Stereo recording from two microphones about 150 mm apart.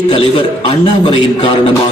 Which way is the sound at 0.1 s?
35° left (ahead or behind).